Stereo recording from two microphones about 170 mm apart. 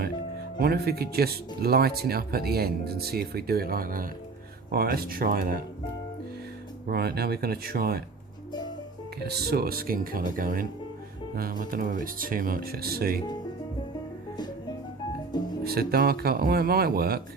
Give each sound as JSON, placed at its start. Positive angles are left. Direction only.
{"t": 0.6, "sound": "speech", "side_deg": -65}
{"t": 6.9, "sound": "speech", "side_deg": -70}
{"t": 9.2, "sound": "speech", "side_deg": -70}
{"t": 15.6, "sound": "speech", "side_deg": -65}